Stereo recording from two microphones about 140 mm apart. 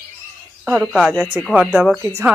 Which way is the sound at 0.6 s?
5° right (ahead or behind).